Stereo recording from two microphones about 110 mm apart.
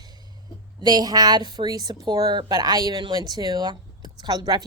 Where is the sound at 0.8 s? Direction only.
40° right (ahead or behind).